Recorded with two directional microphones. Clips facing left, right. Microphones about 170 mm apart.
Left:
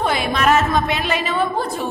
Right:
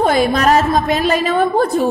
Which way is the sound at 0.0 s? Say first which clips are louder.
Right 5 dB; 40° right (ahead or behind).